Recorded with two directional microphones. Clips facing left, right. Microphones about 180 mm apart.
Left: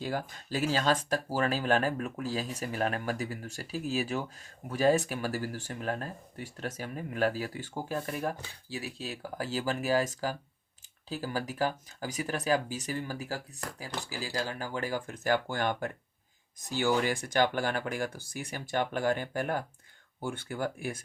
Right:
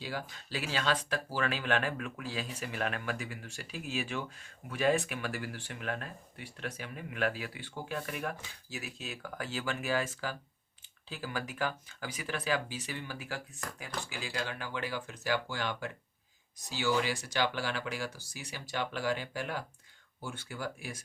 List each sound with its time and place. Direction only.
0.0 s speech: 45° left (ahead or behind)